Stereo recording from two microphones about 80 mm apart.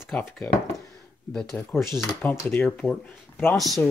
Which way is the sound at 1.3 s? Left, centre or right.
Centre.